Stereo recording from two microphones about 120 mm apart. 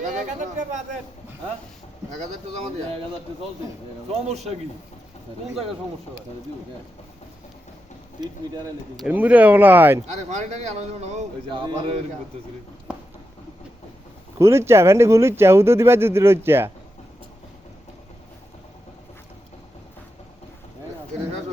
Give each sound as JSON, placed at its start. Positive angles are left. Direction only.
{"t": 0.0, "sound": "speech", "side_deg": -90}
{"t": 4.1, "sound": "a man's voice", "side_deg": -65}
{"t": 8.2, "sound": "speech", "side_deg": -35}
{"t": 9.0, "sound": "speech", "side_deg": -15}
{"t": 10.2, "sound": "speech", "side_deg": -80}
{"t": 11.5, "sound": "a man's voice", "side_deg": -45}
{"t": 12.9, "sound": "a sound", "side_deg": -10}
{"t": 14.3, "sound": "speech", "side_deg": -25}